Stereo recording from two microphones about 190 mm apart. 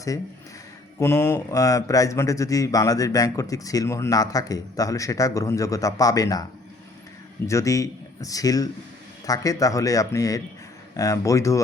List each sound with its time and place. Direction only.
0.9 s speech: 15° left (ahead or behind)
7.4 s speech: 15° left (ahead or behind)